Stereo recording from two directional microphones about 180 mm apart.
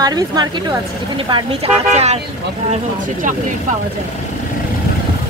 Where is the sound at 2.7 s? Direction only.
45° right (ahead or behind).